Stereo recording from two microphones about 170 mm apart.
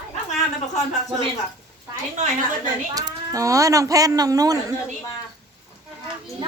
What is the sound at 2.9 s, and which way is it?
Speech, 20° right (ahead or behind).